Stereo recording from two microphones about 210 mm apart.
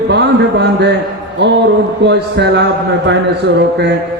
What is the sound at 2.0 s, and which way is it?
A man's voice, 55° right (ahead or behind).